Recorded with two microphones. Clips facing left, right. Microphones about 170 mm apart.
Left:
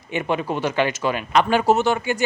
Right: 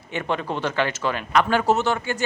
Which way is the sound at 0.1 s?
10° left (ahead or behind).